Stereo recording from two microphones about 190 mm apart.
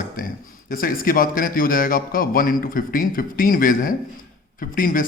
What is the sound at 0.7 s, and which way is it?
A man's voice, 50° left (ahead or behind).